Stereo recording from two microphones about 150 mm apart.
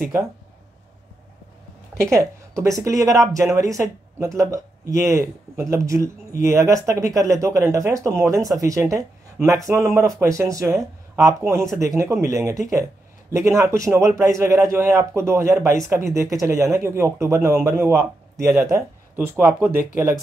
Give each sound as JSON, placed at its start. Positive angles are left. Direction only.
{"t": 0.0, "sound": "speech", "side_deg": -15}
{"t": 2.0, "sound": "speech", "side_deg": -20}